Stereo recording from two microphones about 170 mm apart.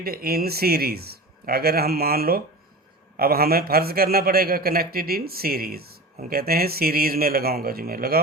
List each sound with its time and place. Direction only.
0.0 s a man's voice: 65° right (ahead or behind)